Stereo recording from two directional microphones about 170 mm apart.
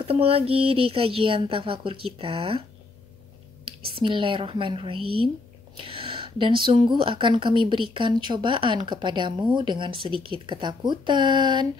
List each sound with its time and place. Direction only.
0.0 s speech: 35° right (ahead or behind)
3.6 s speech: 30° right (ahead or behind)